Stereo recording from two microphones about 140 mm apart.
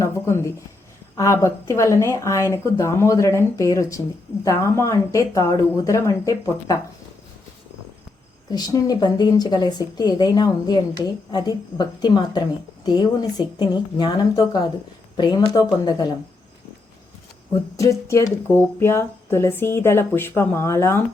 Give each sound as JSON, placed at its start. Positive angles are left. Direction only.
{"t": 0.0, "sound": "speech", "side_deg": 20}
{"t": 8.4, "sound": "a woman's voice", "side_deg": 30}
{"t": 17.5, "sound": "speech", "side_deg": 25}